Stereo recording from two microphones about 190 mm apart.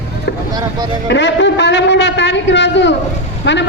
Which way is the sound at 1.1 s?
70° left (ahead or behind).